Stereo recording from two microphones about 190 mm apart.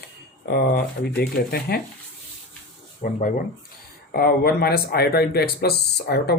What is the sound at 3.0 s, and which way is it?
Speech, 45° left (ahead or behind).